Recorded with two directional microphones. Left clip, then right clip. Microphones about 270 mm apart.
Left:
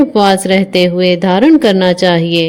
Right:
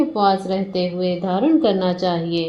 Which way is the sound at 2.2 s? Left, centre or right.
Left.